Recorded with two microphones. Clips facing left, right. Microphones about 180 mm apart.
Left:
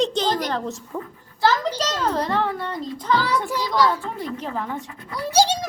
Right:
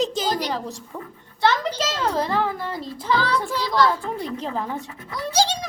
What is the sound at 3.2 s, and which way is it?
Child singing, 15° left (ahead or behind).